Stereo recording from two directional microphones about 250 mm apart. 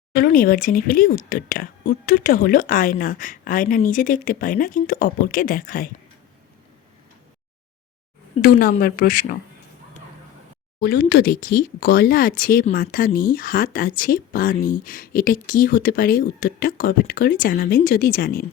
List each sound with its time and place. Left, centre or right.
0.1 s speech: left
8.4 s speech: left
10.8 s speech: left